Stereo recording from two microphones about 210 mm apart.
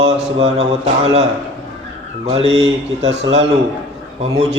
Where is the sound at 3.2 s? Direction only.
60° right (ahead or behind).